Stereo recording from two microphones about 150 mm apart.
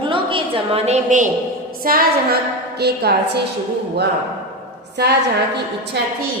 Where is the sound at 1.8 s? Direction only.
75° right (ahead or behind).